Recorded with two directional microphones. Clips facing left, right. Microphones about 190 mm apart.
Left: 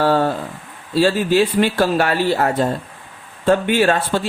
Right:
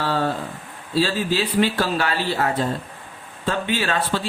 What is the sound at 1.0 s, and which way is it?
Speech, 55° left (ahead or behind).